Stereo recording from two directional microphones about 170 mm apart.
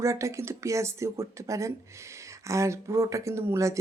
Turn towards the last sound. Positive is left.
turn(degrees=-15)  # may be behind; listen again after turning